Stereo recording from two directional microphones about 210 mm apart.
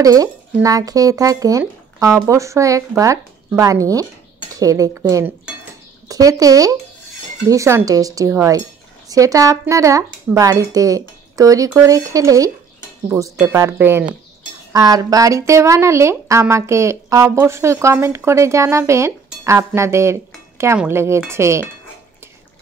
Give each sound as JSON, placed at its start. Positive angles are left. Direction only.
{"t": 0.0, "sound": "a woman's voice", "side_deg": -15}